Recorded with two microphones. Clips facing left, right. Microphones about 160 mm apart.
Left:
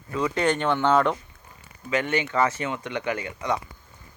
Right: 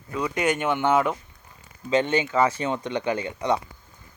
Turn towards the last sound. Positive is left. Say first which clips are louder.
# right 3 dB
turn(degrees=-25)  # may be behind; listen again after turning